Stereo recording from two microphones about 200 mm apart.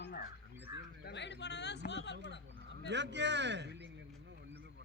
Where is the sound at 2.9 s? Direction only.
60° right (ahead or behind).